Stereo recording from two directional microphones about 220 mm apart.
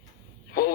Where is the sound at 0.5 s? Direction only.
45° left (ahead or behind).